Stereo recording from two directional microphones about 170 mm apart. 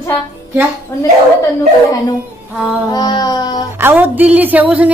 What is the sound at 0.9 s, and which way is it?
Speech, 15° left (ahead or behind).